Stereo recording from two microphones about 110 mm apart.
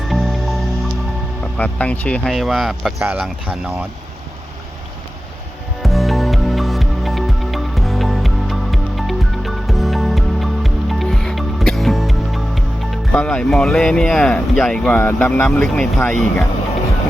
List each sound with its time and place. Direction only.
0.0 s music: centre (ahead or behind)
1.5 s speech: 15° left (ahead or behind)
2.3 s speech: centre (ahead or behind)
3.0 s speech: 15° right (ahead or behind)
3.4 s speech: 5° right (ahead or behind)
5.8 s music: centre (ahead or behind)
15.4 s speech: 5° left (ahead or behind)